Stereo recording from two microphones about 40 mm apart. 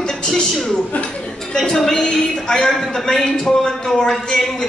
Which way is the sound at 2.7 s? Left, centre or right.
Centre.